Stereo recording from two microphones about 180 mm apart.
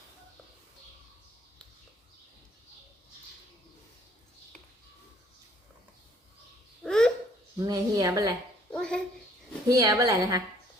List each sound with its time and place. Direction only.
6.8 s babbling: 5° left (ahead or behind)
7.6 s a woman's voice: 20° right (ahead or behind)
8.7 s a sound: 5° left (ahead or behind)
9.6 s a woman's voice: 20° right (ahead or behind)